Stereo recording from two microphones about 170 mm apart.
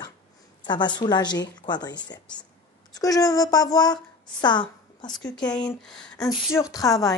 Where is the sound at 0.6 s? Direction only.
25° left (ahead or behind).